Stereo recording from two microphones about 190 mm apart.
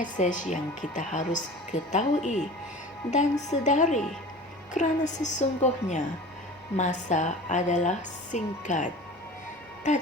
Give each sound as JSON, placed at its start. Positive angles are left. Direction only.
{"t": 0.0, "sound": "a woman's voice", "side_deg": 40}